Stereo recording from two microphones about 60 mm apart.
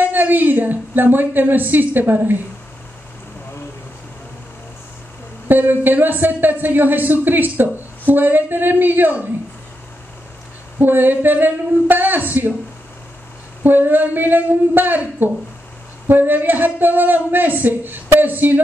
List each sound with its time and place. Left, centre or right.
0.0 s speech: right
5.5 s speech: right
10.8 s speech: right
13.6 s speech: right